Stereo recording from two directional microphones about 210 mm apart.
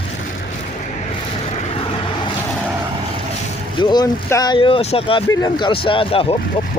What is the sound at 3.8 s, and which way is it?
Speech, 20° left (ahead or behind).